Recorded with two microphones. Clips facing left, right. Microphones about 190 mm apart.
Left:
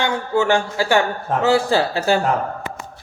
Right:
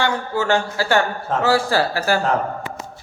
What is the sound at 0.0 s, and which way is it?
A man's voice, 15° left (ahead or behind).